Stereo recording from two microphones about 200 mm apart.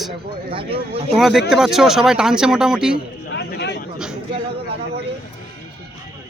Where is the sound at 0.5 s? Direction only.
25° right (ahead or behind).